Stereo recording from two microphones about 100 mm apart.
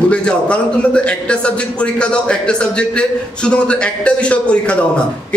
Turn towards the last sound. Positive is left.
turn(degrees=10)  # may be behind; listen again after turning